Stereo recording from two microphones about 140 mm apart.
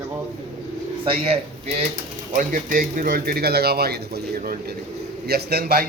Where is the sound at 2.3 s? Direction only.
70° right (ahead or behind); by 3.8 s 90° right.